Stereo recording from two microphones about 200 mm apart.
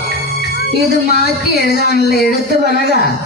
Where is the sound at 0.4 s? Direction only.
55° left (ahead or behind).